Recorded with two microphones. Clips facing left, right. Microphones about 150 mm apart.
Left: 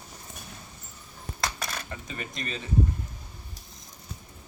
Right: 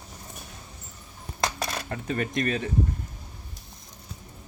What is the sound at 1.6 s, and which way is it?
Dishes, 30° right (ahead or behind).